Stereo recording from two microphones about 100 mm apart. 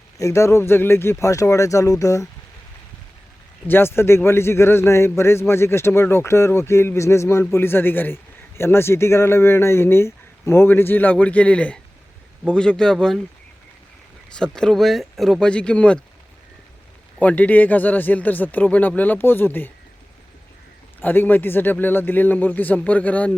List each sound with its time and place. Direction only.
0.2 s speech: 30° left (ahead or behind)
3.7 s a man's voice: 25° left (ahead or behind); by 13.2 s 5° left (ahead or behind)
14.3 s speech: 10° left (ahead or behind)
17.2 s speech: 15° left (ahead or behind)
21.0 s speech: 20° left (ahead or behind)